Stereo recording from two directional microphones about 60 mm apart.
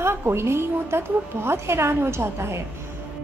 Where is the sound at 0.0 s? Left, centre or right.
Right.